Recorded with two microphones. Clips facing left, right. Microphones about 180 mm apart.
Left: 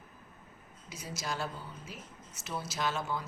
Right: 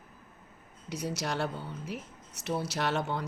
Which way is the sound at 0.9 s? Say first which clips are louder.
Right 6 dB; 65° right (ahead or behind).